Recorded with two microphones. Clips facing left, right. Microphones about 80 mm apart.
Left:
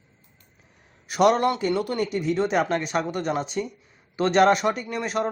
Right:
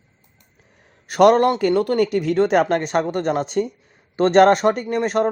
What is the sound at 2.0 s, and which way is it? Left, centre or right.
Speech, right.